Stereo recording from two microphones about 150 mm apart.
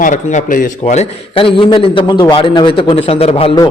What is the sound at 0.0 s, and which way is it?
Speech, 55° left (ahead or behind).